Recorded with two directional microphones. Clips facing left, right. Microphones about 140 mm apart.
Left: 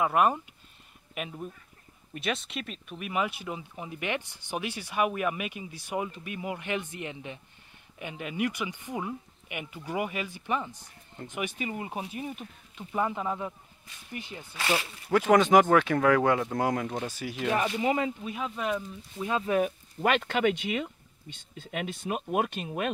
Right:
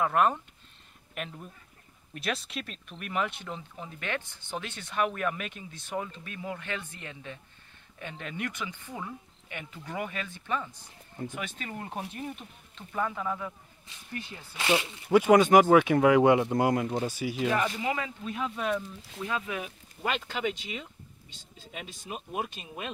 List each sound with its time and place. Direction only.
0.0 s speech: 10° left (ahead or behind)
12.9 s speech: 20° left (ahead or behind)
14.5 s speech: 20° right (ahead or behind)
15.0 s speech: 5° right (ahead or behind)
16.6 s speech: 5° right (ahead or behind)
17.5 s speech: 20° left (ahead or behind)
18.2 s speech: 5° left (ahead or behind)
19.2 s speech: 25° left (ahead or behind)
20.0 s speech: 60° left (ahead or behind)